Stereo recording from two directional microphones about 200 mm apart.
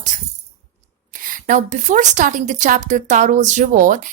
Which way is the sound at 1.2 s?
40° right (ahead or behind).